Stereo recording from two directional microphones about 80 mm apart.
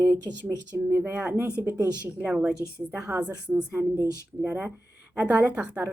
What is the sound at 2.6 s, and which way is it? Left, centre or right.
Speech, left.